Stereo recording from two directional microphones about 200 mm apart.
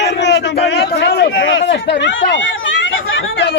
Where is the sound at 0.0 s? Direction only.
60° left (ahead or behind).